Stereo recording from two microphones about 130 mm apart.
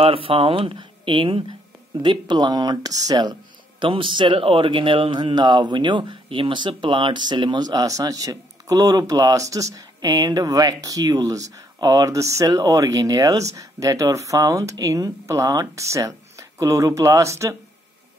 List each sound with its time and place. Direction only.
0.0 s speech: 45° right (ahead or behind); by 17.6 s 25° right (ahead or behind)